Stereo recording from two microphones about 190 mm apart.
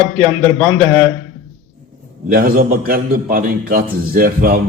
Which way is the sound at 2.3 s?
50° right (ahead or behind).